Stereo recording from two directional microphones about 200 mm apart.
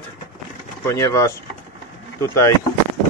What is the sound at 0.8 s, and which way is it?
Speech, 15° left (ahead or behind).